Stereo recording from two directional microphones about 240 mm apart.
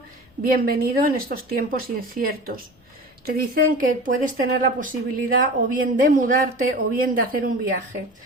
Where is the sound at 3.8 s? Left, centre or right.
Right.